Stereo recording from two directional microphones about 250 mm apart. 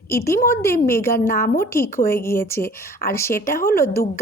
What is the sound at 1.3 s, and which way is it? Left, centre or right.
Speech, left.